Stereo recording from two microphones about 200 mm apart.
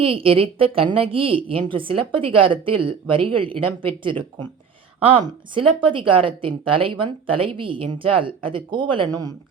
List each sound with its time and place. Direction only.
0.0 s speech: 30° right (ahead or behind)